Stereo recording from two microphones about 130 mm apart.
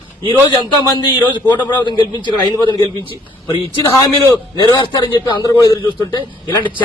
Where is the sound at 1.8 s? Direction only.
35° left (ahead or behind).